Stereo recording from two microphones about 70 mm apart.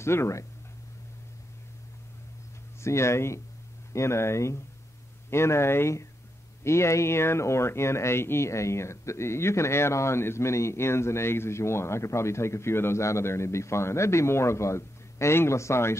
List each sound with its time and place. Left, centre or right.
0.0 s speech: left
2.8 s speech: left